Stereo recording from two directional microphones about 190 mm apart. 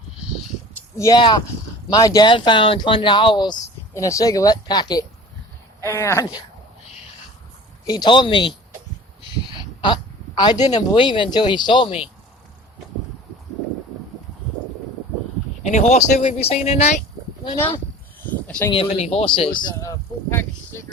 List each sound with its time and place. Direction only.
0.9 s speech: 15° left (ahead or behind)
7.9 s speech: 20° left (ahead or behind)
9.8 s speech: 25° left (ahead or behind)
15.6 s speech: 35° left (ahead or behind)
18.3 s a sound: 10° left (ahead or behind)
18.7 s speech: 30° left (ahead or behind)
19.8 s a sound: 15° left (ahead or behind)